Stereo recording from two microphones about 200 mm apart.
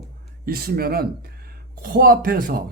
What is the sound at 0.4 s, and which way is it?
A man's voice, 50° right (ahead or behind).